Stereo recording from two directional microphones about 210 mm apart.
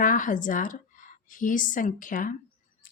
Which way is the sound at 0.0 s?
40° left (ahead or behind).